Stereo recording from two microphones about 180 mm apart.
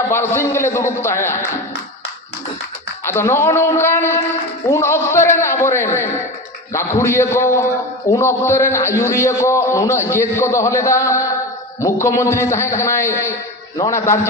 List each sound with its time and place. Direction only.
0.1 s a man's voice: 15° left (ahead or behind)
3.1 s a man's voice: 15° left (ahead or behind)